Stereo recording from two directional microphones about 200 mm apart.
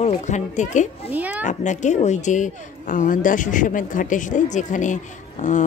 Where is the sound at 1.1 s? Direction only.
10° right (ahead or behind).